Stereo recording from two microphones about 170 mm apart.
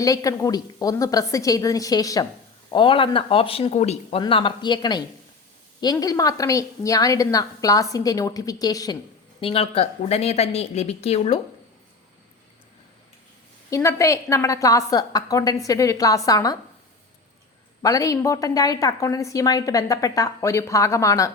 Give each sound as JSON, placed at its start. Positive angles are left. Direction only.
{"t": 0.0, "sound": "a woman's voice", "side_deg": 20}
{"t": 4.2, "sound": "a woman's voice", "side_deg": 30}
{"t": 9.4, "sound": "speech", "side_deg": 35}
{"t": 13.7, "sound": "a woman's voice", "side_deg": 20}
{"t": 17.8, "sound": "a woman's voice", "side_deg": 20}